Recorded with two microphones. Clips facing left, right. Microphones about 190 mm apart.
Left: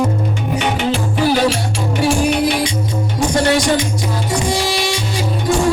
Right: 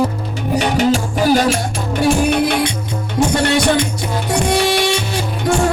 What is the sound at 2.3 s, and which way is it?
Music, 55° right (ahead or behind).